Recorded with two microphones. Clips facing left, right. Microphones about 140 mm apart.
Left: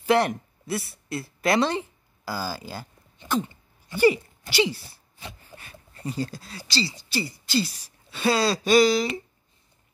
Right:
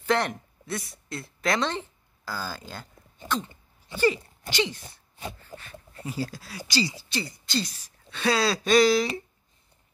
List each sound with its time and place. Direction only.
0.0 s speech: 10° left (ahead or behind)
3.9 s speech: 10° left (ahead or behind)
5.5 s a sound: 40° right (ahead or behind)
6.0 s speech: 5° right (ahead or behind)
6.6 s speech: 15° right (ahead or behind)
7.0 s speech: 5° left (ahead or behind)